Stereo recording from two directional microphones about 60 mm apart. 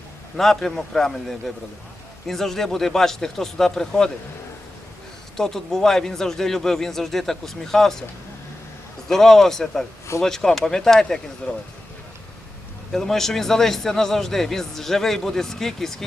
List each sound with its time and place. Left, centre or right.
0.3 s a man's voice: centre
5.4 s speech: centre
9.0 s speech: centre
12.9 s speech: centre